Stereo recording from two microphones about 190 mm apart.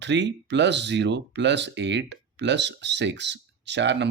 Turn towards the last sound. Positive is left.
turn(degrees=-65)  # may be behind; listen again after turning